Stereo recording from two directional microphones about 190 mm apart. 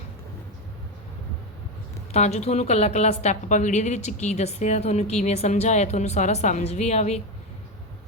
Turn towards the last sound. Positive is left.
turn(degrees=35)  # may be behind; listen again after turning